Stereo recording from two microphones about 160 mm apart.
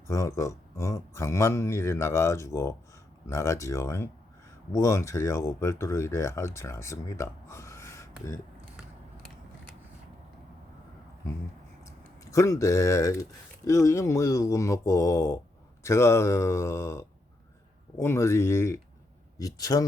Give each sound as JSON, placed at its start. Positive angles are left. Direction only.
{"t": 0.1, "sound": "speech", "side_deg": 20}
{"t": 11.9, "sound": "speech", "side_deg": 20}